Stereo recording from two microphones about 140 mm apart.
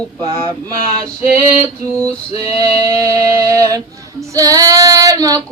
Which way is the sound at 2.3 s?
25° right (ahead or behind).